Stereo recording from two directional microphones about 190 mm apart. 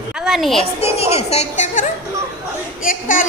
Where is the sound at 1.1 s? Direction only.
35° left (ahead or behind).